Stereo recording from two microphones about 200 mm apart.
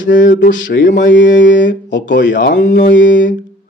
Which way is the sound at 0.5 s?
65° left (ahead or behind).